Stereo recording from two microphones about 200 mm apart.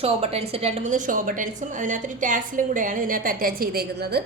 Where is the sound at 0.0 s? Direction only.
30° right (ahead or behind).